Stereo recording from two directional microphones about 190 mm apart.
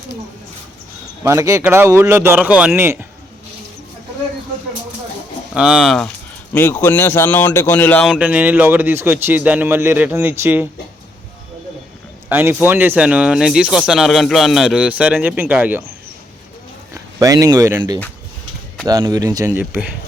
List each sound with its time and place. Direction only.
1.2 s speech: 15° right (ahead or behind)
5.5 s speech: 5° right (ahead or behind)
6.5 s speech: 10° left (ahead or behind)
8.1 s speech: 10° right (ahead or behind)
12.3 s speech: 10° right (ahead or behind)
16.9 s speech: 20° right (ahead or behind)